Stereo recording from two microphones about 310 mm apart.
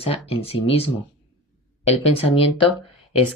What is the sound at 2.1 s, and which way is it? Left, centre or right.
Speech, centre.